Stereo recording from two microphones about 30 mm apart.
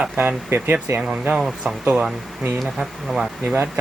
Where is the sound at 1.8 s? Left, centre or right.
Right.